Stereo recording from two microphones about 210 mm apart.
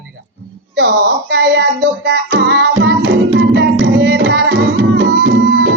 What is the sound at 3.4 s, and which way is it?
Music, 55° right (ahead or behind).